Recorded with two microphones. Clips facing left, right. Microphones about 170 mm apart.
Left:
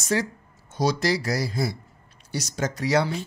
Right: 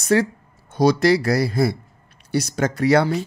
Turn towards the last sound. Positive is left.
turn(degrees=-60)  # may be behind; listen again after turning